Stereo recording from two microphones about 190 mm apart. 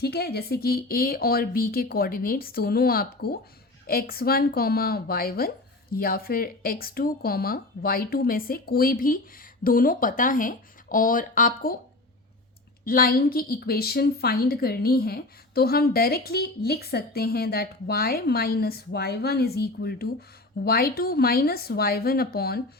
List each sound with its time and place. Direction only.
0.0 s a woman's voice: 55° left (ahead or behind)
12.8 s a woman's voice: 50° left (ahead or behind)